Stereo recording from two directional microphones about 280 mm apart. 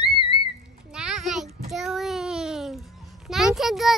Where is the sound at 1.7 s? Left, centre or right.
Centre.